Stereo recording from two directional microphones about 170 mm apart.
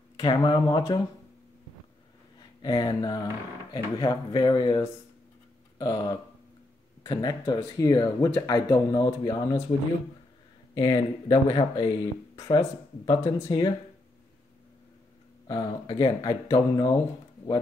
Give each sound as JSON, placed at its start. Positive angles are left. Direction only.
{"t": 0.2, "sound": "speech", "side_deg": 25}
{"t": 2.6, "sound": "speech", "side_deg": 25}
{"t": 15.4, "sound": "speech", "side_deg": 25}